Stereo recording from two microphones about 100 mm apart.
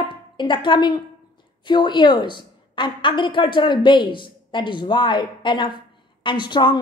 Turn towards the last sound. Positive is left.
turn(degrees=50)  # may be behind; listen again after turning